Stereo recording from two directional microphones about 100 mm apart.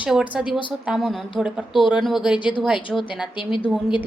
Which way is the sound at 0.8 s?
5° right (ahead or behind).